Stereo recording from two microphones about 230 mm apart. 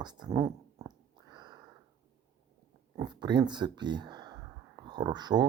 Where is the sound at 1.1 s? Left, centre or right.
Centre.